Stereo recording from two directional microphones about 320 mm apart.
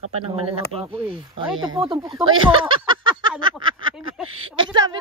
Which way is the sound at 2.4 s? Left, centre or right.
Centre.